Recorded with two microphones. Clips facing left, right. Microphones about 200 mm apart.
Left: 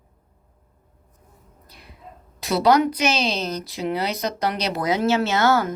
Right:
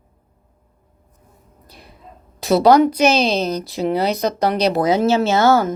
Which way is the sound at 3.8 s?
45° right (ahead or behind).